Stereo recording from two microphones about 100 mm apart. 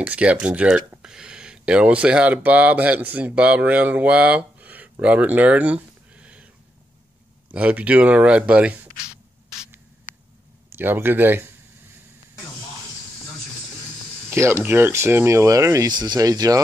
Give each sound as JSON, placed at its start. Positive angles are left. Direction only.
{"t": 0.0, "sound": "speech", "side_deg": -15}
{"t": 5.0, "sound": "a sound", "side_deg": -15}
{"t": 7.5, "sound": "speech", "side_deg": -15}
{"t": 10.8, "sound": "speech", "side_deg": -20}
{"t": 14.3, "sound": "speech", "side_deg": -25}
{"t": 15.9, "sound": "speech", "side_deg": -45}